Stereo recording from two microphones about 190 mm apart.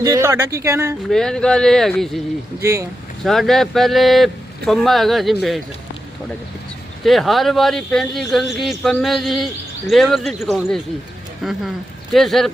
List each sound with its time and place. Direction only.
0.0 s speech: 15° right (ahead or behind)
1.1 s speech: 5° left (ahead or behind)
2.6 s speech: 15° right (ahead or behind)
3.2 s speech: centre (ahead or behind)
7.0 s speech: centre (ahead or behind)